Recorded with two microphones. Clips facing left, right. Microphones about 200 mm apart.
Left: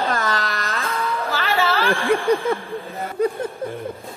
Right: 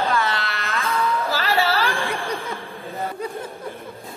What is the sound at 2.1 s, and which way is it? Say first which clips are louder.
Snicker: left 9 dB; 50° left (ahead or behind).